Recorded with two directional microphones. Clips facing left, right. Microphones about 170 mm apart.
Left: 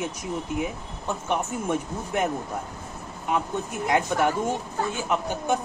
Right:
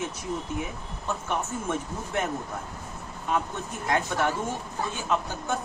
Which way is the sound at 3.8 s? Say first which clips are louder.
Left 3 dB; 15° left (ahead or behind).